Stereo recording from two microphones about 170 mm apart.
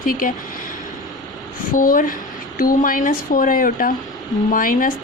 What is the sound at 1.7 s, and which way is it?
Speech, 55° left (ahead or behind).